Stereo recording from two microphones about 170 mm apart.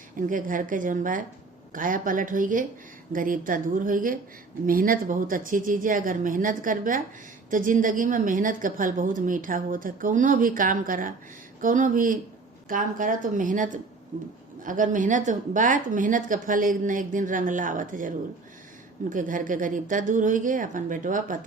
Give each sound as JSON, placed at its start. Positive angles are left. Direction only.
{"t": 0.2, "sound": "a woman's voice", "side_deg": -50}
{"t": 19.1, "sound": "a woman's voice", "side_deg": -50}